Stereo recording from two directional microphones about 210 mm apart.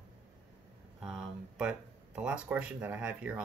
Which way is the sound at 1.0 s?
Centre (ahead or behind).